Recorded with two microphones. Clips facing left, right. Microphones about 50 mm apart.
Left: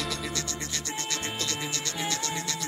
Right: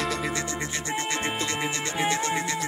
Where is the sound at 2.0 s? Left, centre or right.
Right.